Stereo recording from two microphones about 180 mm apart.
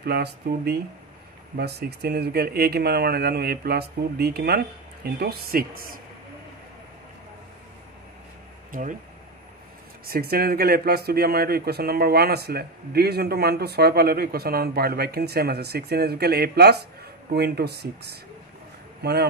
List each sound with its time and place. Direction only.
0.0 s speech: 60° right (ahead or behind)
10.0 s speech: 55° right (ahead or behind)